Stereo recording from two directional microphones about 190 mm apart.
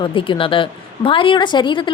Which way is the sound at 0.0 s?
25° left (ahead or behind).